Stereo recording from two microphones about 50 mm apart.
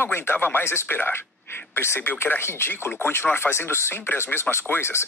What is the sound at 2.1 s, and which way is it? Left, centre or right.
A man's voice, left.